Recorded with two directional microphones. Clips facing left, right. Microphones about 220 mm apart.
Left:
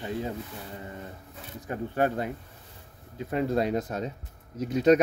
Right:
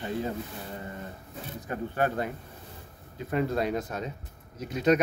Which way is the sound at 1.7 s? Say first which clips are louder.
Left 2 dB; 25° left (ahead or behind).